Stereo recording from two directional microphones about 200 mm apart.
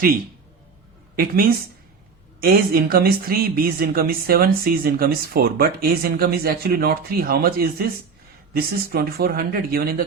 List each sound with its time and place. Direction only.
1.1 s speech: 45° right (ahead or behind)